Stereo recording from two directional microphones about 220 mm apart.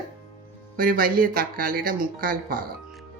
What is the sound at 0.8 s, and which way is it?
Speech, 40° right (ahead or behind).